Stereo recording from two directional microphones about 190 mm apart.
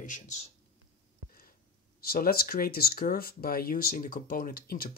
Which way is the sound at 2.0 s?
50° left (ahead or behind).